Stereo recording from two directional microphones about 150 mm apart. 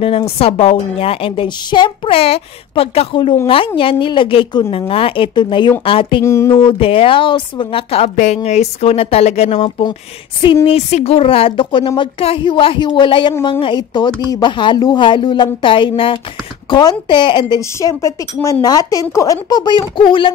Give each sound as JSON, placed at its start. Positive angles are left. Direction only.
{"t": 0.0, "sound": "a woman's voice", "side_deg": 40}
{"t": 6.2, "sound": "a woman's voice", "side_deg": 20}
{"t": 6.6, "sound": "a woman's voice", "side_deg": 35}
{"t": 10.4, "sound": "a woman's voice", "side_deg": 35}